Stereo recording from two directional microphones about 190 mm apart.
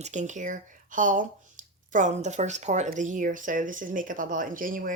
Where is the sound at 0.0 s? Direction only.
40° right (ahead or behind).